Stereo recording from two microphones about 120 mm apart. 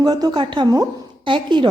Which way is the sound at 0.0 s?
35° right (ahead or behind).